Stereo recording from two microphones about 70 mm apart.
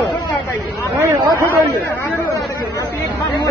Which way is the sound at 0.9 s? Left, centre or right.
Right.